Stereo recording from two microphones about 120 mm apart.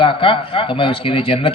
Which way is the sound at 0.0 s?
45° left (ahead or behind).